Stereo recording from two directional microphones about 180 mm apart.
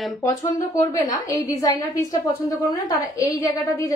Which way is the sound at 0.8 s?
20° left (ahead or behind).